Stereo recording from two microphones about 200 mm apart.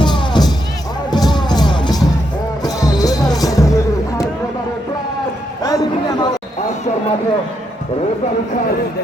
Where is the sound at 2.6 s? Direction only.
20° left (ahead or behind).